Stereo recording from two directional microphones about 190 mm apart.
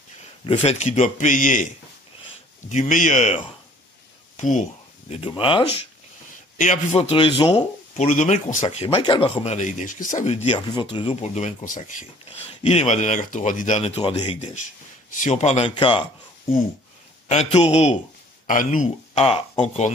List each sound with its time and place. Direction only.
0.5 s speech: 30° left (ahead or behind)
2.7 s speech: 40° left (ahead or behind)
4.4 s speech: 40° left (ahead or behind)
5.1 s speech: 30° left (ahead or behind)
6.6 s speech: 35° left (ahead or behind)
10.7 s speech: 25° left (ahead or behind); by 12.1 s 45° left (ahead or behind)
12.3 s speech: 35° left (ahead or behind)
15.1 s speech: 40° left (ahead or behind)
17.3 s speech: 35° left (ahead or behind)
18.5 s speech: 45° left (ahead or behind)
19.1 s speech: 30° left (ahead or behind)